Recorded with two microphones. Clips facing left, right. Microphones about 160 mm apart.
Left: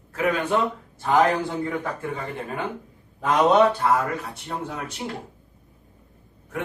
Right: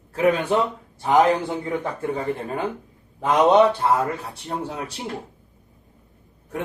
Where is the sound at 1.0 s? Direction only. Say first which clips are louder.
Right 2 dB; 20° right (ahead or behind).